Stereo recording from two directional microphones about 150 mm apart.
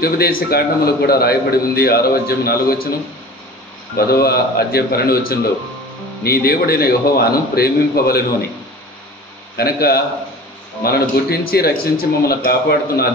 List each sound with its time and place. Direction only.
0.0 s a man's voice: 85° left
3.9 s a man's voice: 90° left
9.6 s a man's voice: 90° left